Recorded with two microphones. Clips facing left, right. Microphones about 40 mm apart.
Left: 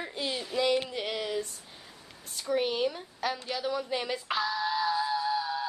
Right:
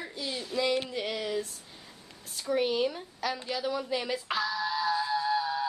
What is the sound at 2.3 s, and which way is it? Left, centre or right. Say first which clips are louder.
A woman's voice: right 1 dB; centre.